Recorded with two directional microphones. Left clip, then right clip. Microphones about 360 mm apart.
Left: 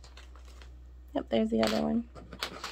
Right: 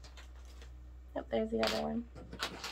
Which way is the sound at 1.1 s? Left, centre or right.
Left.